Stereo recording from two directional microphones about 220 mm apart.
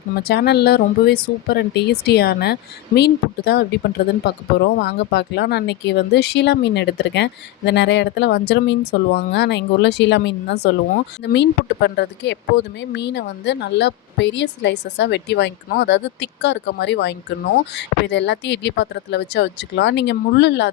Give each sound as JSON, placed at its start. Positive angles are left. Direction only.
{"t": 0.2, "sound": "speech", "side_deg": 45}